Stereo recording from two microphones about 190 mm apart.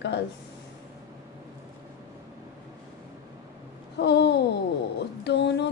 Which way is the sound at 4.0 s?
60° left (ahead or behind).